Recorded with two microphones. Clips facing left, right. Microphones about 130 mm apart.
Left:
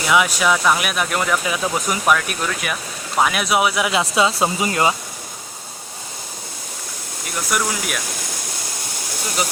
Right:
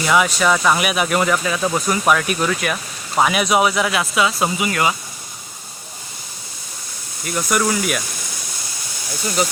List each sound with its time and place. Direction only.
0.0 s speech: centre (ahead or behind)
4.0 s speech: 30° left (ahead or behind)
7.3 s speech: centre (ahead or behind)